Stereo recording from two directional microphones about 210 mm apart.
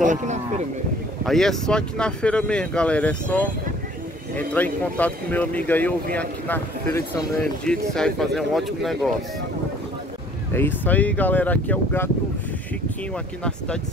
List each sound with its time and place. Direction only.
0.0 s speech: 35° right (ahead or behind)
1.2 s speech: centre (ahead or behind)
7.9 s speech: centre (ahead or behind)
10.5 s speech: 10° left (ahead or behind)